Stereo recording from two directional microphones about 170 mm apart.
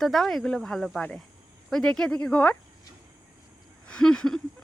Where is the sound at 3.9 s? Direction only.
5° left (ahead or behind).